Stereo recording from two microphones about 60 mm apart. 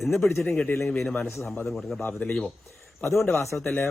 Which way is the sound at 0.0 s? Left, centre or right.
Centre.